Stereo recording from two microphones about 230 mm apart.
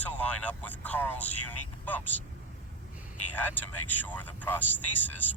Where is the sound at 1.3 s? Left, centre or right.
Left.